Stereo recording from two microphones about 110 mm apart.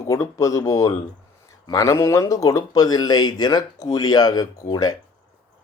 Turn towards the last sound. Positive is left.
turn(degrees=35)  # may be behind; listen again after turning